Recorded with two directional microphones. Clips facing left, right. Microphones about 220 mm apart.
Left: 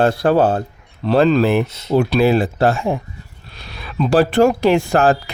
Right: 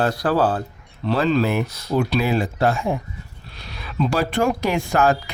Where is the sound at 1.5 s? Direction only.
25° left (ahead or behind).